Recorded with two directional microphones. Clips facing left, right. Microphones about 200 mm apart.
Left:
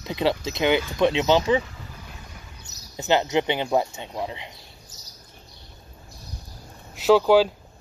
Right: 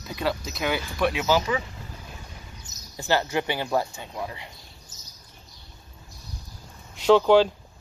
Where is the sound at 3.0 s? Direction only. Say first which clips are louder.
Left 3 dB; 20° left (ahead or behind).